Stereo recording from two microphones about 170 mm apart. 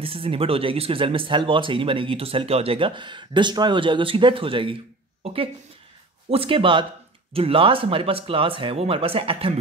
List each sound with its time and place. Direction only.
0.0 s speech: 35° right (ahead or behind)
5.2 s a sound: 35° right (ahead or behind)
6.3 s speech: 30° right (ahead or behind)